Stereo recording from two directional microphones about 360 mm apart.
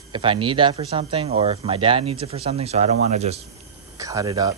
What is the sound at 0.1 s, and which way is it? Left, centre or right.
Speech, centre.